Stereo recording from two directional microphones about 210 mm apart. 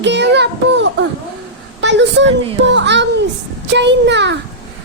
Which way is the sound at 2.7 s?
55° right (ahead or behind).